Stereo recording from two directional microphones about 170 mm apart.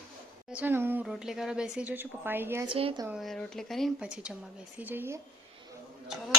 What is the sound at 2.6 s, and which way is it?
Speech, 30° right (ahead or behind).